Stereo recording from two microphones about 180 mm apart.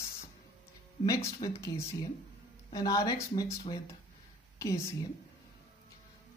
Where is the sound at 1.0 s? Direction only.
15° left (ahead or behind).